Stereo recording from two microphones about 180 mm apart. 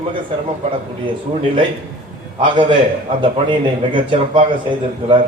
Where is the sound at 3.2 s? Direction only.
25° right (ahead or behind).